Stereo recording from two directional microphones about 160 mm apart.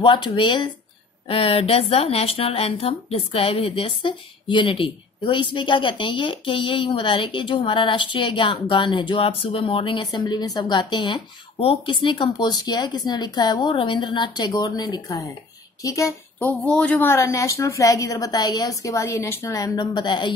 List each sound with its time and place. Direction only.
0.0 s a woman's voice: 30° left (ahead or behind)
16.6 s a woman's voice: 5° left (ahead or behind); by 20.3 s 30° left (ahead or behind)